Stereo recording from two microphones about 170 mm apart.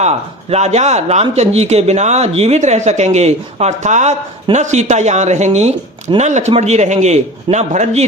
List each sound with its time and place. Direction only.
0.5 s a man's voice: 40° right (ahead or behind)